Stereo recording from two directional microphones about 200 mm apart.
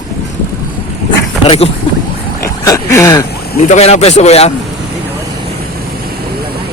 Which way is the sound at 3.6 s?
35° left (ahead or behind).